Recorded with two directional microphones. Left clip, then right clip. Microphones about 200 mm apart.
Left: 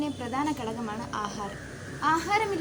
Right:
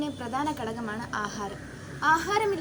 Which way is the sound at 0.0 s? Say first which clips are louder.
Even; 25° right (ahead or behind).